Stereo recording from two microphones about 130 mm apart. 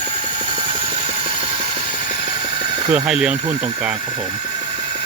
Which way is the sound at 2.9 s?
5° right (ahead or behind).